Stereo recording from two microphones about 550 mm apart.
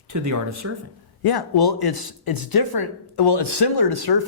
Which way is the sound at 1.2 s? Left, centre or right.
Left.